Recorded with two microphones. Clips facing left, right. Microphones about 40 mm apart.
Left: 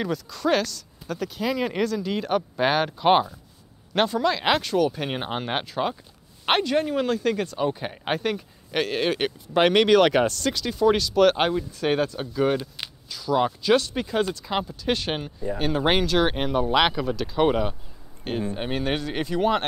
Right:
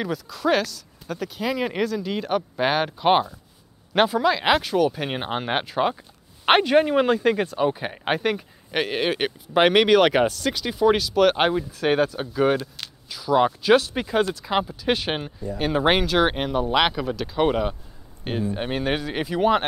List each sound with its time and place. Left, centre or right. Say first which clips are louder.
0.0 s speech: right 1 dB; centre